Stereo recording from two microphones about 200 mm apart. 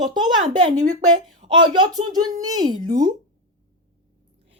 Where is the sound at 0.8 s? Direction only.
40° right (ahead or behind).